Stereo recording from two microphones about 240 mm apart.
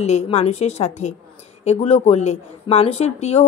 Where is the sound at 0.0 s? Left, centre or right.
Left.